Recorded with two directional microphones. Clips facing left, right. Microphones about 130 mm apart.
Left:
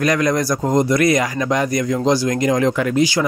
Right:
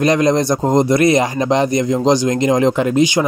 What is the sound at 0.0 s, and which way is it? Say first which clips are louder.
Speech: right 4 dB; 25° right (ahead or behind).